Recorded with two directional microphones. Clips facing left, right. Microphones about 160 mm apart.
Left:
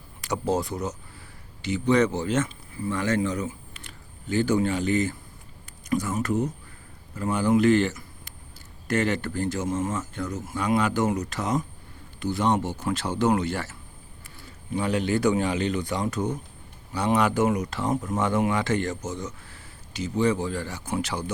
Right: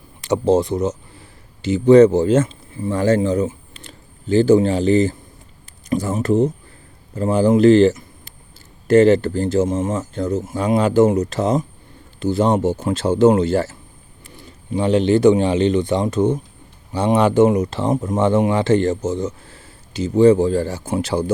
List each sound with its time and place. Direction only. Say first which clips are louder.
0.2 s speech: right 10 dB; 25° right (ahead or behind)
9.9 s speech: right 9 dB; 30° right (ahead or behind)